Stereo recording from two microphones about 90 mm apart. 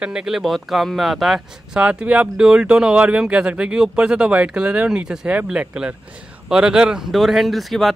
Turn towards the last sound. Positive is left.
turn(degrees=0)  # may be behind; listen again after turning